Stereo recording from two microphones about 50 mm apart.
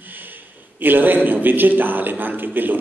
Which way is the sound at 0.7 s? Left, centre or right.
Right.